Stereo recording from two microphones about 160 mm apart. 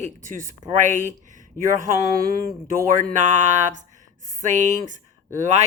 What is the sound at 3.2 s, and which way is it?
Speech, 50° right (ahead or behind).